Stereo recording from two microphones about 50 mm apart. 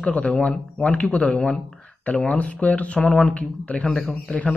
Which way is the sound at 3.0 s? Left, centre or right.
Centre.